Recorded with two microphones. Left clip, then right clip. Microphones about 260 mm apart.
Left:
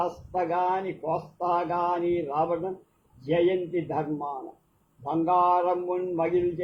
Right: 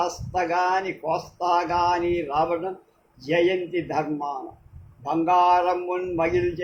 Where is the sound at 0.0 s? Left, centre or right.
Right.